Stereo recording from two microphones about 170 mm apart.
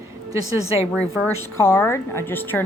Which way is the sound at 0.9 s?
10° left (ahead or behind).